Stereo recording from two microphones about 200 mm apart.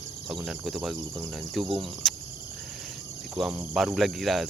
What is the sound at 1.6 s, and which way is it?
Speech, 25° right (ahead or behind).